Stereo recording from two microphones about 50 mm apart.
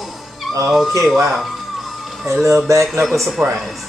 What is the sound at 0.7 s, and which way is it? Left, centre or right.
Music, centre.